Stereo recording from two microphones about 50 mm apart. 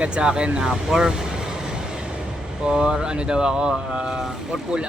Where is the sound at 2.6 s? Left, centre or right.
Centre.